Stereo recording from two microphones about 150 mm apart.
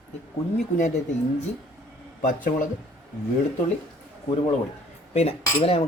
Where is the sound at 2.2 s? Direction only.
65° left (ahead or behind).